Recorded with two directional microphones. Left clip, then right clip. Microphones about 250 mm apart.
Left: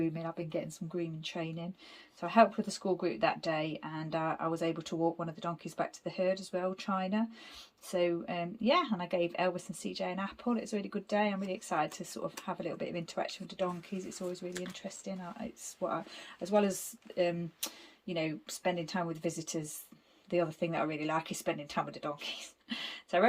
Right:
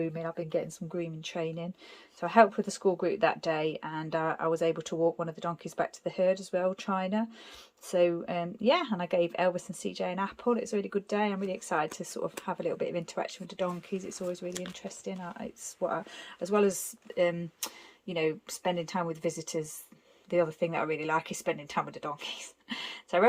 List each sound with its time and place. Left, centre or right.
0.2 s speech: centre
14.7 s speech: centre
16.1 s speech: centre